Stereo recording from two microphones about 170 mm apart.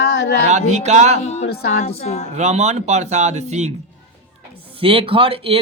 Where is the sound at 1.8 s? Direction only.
35° left (ahead or behind).